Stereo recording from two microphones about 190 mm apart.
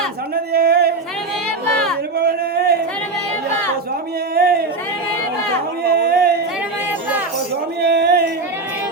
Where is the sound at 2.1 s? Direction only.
55° right (ahead or behind).